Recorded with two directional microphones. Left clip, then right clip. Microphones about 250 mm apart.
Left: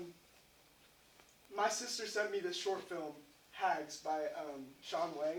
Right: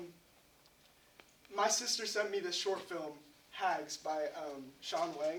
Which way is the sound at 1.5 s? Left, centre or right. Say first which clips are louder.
Right 3 dB; centre.